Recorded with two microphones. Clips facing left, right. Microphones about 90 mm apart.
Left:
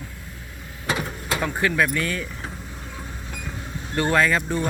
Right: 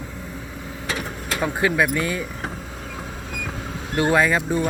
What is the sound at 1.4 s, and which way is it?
Speech, 15° right (ahead or behind).